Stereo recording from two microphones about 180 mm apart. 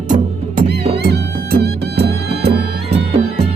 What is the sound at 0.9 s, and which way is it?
Music, 65° right (ahead or behind).